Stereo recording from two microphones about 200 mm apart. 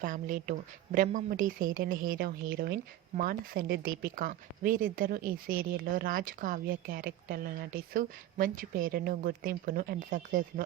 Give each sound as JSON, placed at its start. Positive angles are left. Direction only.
{"t": 0.0, "sound": "speech", "side_deg": -40}